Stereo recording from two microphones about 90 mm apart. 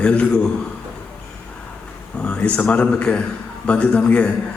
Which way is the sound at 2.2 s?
15° left (ahead or behind).